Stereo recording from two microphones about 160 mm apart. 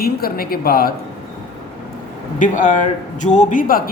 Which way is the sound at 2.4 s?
55° left (ahead or behind).